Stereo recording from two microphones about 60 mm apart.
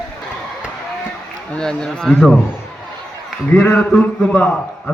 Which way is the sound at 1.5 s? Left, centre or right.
Centre.